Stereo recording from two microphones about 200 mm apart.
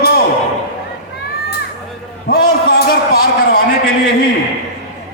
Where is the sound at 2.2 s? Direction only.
50° left (ahead or behind).